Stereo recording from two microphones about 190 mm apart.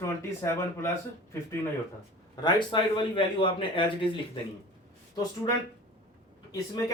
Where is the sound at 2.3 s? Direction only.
25° left (ahead or behind).